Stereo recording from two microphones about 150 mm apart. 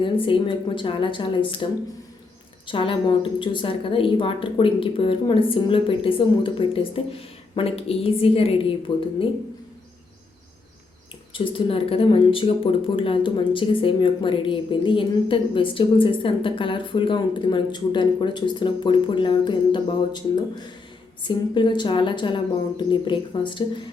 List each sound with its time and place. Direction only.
0.0 s a woman's voice: 35° left (ahead or behind)
2.6 s a woman's voice: 35° left (ahead or behind)
11.3 s a woman's voice: 35° left (ahead or behind)